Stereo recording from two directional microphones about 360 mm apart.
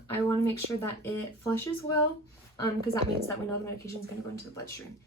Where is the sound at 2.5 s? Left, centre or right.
Centre.